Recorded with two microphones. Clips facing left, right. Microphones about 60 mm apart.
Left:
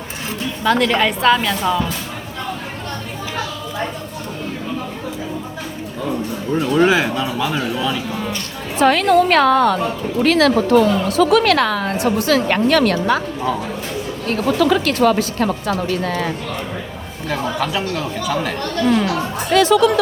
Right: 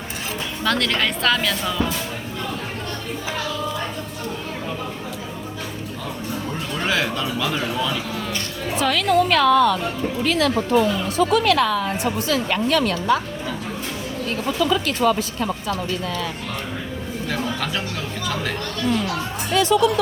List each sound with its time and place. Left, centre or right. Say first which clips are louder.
0.6 s speech: left 6 dB; centre
6.8 s speech: left 6 dB; centre
8.8 s a woman's voice: left 6 dB; left
10.2 s a woman's voice: left 7 dB; left
14.3 s a woman's voice: left 6 dB; left
17.2 s a man's voice: left 6 dB; centre
18.9 s a woman's voice: left 5 dB; left